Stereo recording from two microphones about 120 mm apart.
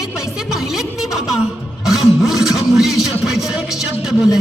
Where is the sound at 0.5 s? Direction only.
Centre (ahead or behind).